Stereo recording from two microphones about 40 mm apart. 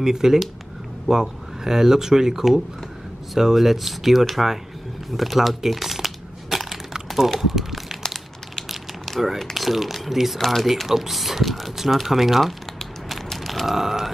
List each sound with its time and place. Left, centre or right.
0.0 s speech: centre
5.1 s a sound: centre
8.1 s crumpling: centre
9.4 s speech: centre
11.9 s crumpling: centre
13.3 s mechanisms: centre